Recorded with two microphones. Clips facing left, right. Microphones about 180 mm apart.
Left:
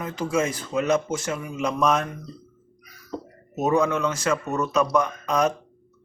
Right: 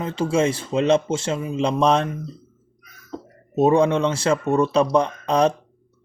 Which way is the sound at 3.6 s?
30° right (ahead or behind).